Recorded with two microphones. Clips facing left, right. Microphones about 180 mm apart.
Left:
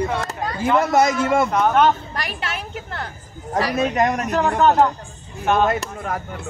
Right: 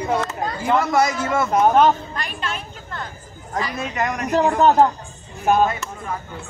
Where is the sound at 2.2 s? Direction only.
80° left.